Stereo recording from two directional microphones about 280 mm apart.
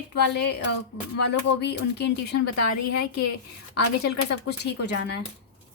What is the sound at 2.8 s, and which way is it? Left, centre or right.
Speech, left.